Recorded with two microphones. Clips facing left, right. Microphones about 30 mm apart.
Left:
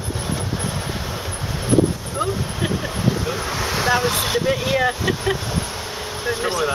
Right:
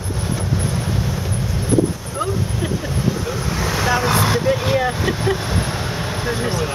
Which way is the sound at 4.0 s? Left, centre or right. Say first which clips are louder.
Right 3 dB; right.